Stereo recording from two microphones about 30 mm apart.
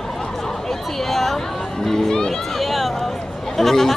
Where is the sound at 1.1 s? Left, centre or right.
Centre.